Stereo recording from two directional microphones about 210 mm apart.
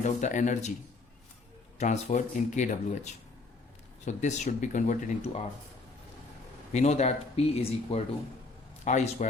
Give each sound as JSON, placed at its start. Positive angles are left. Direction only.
{"t": 0.0, "sound": "speech", "side_deg": 35}
{"t": 1.8, "sound": "speech", "side_deg": 35}
{"t": 6.7, "sound": "a man's voice", "side_deg": 30}